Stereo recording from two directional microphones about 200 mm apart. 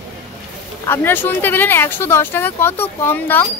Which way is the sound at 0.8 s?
10° left (ahead or behind).